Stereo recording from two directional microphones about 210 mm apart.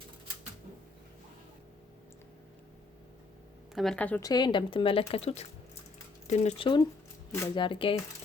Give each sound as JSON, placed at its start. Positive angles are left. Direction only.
{"t": 3.8, "sound": "a woman's voice", "side_deg": 5}
{"t": 4.3, "sound": "a woman's voice", "side_deg": 20}